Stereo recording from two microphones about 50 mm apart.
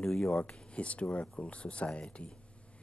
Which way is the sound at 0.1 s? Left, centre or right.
Centre.